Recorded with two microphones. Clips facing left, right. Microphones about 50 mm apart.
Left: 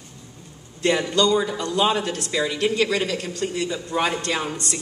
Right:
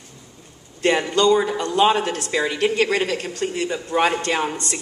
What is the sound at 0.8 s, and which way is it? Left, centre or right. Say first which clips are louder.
A man's voice: right 3 dB; right.